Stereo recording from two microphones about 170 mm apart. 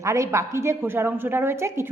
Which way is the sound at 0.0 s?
15° right (ahead or behind).